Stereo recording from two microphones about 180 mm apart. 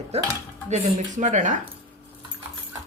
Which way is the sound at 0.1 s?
35° right (ahead or behind).